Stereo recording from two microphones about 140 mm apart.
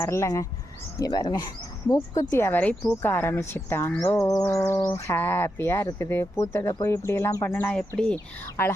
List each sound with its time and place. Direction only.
0.0 s speech: 20° left (ahead or behind)